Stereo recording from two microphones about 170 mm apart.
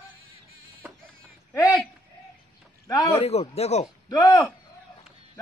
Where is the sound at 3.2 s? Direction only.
35° left (ahead or behind).